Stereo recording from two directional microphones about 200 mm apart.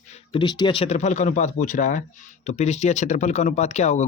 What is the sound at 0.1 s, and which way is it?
Speech, 25° left (ahead or behind).